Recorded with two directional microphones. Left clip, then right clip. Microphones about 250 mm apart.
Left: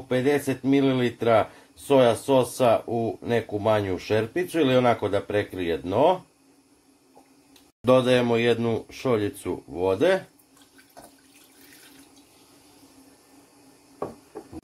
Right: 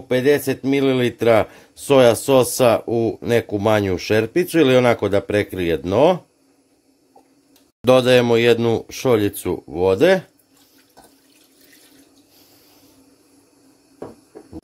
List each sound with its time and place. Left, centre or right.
0.1 s speech: right
7.8 s speech: right